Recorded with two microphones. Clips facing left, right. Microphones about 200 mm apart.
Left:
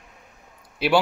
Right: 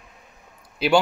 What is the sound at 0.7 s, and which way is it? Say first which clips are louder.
Speech: right 1 dB; 5° left (ahead or behind).